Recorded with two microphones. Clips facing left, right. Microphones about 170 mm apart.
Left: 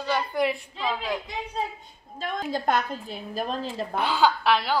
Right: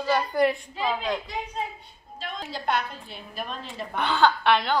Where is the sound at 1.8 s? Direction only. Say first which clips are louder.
Left 4 dB; 50° left (ahead or behind).